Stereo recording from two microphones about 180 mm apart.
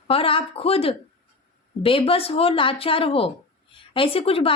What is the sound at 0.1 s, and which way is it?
A woman's voice, 30° left (ahead or behind).